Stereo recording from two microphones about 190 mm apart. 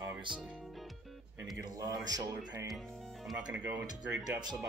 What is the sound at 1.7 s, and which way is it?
Speech, 20° right (ahead or behind).